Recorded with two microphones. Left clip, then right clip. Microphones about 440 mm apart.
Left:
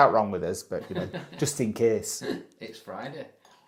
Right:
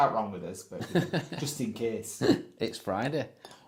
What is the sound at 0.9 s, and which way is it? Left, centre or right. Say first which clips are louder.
Speech: right 4 dB; right.